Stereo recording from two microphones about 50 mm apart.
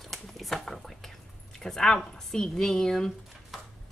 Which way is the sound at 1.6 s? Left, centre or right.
Centre.